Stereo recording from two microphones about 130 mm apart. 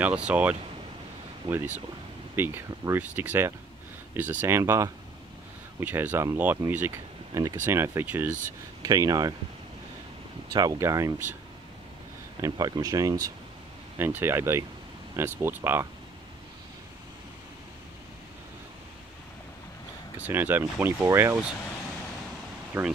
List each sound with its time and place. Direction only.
0.0 s speech: 10° right (ahead or behind)
8.8 s speech: 25° right (ahead or behind)
10.5 s speech: 25° right (ahead or behind)
12.4 s speech: 30° right (ahead or behind)
13.9 s speech: 15° right (ahead or behind)
20.2 s speech: 15° right (ahead or behind)
22.7 s speech: 15° right (ahead or behind)